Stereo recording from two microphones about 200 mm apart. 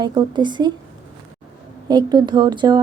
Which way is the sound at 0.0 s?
20° right (ahead or behind).